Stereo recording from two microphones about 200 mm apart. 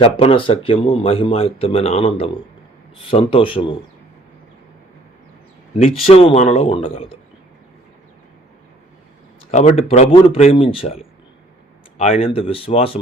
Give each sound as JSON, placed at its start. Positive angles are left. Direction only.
{"t": 0.0, "sound": "speech", "side_deg": 30}
{"t": 6.1, "sound": "speech", "side_deg": 30}
{"t": 9.5, "sound": "speech", "side_deg": 35}